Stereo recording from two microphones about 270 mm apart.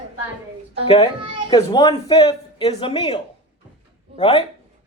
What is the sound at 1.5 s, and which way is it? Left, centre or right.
Speech, centre.